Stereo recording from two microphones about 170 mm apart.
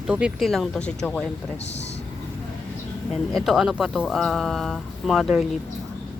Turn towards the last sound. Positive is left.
turn(degrees=0)  # may be behind; listen again after turning